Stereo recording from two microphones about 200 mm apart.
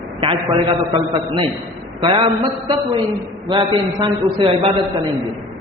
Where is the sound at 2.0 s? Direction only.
25° right (ahead or behind).